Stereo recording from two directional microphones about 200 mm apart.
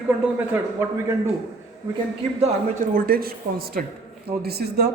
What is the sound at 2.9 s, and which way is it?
Speech, 50° right (ahead or behind).